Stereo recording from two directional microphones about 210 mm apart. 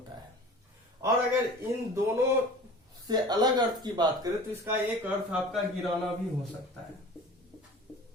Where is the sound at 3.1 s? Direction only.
20° right (ahead or behind).